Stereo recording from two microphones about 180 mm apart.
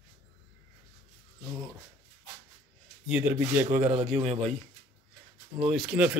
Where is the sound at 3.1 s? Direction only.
10° right (ahead or behind).